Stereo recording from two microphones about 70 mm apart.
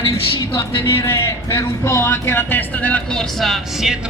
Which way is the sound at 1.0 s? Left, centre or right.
Left.